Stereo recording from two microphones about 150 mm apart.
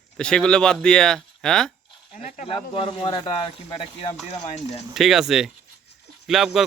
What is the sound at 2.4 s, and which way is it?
Speech, 35° left (ahead or behind).